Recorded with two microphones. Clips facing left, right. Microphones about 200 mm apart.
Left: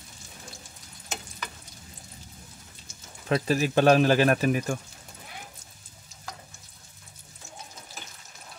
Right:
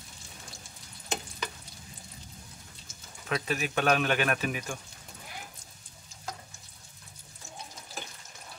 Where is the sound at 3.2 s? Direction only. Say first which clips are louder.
Left 7 dB; 35° left (ahead or behind).